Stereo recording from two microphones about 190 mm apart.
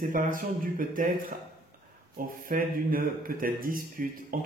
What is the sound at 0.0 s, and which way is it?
Speech, 45° right (ahead or behind).